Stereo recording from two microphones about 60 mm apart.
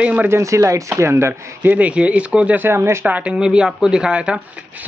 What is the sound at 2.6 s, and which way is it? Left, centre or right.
Speech, right.